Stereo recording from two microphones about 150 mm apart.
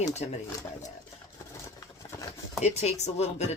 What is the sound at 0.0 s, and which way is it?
Speech, 50° left (ahead or behind).